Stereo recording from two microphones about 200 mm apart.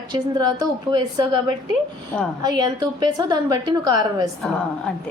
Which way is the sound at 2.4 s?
20° right (ahead or behind).